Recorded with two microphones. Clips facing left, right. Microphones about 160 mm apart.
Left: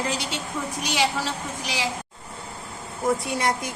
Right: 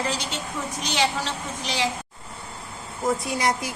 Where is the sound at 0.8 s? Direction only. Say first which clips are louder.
Even; 10° left (ahead or behind).